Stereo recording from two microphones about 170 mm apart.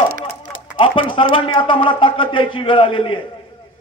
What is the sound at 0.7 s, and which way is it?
A man's voice, 30° left (ahead or behind).